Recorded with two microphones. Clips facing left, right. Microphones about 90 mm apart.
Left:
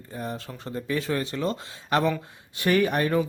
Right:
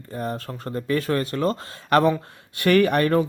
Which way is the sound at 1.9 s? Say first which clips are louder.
Right 5 dB; 60° right (ahead or behind).